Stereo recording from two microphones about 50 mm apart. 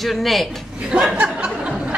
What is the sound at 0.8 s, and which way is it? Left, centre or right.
Speech, centre.